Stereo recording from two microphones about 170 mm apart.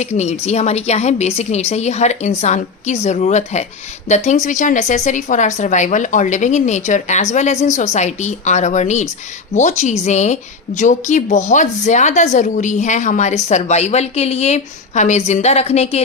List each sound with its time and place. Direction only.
0.0 s a woman's voice: 40° left (ahead or behind)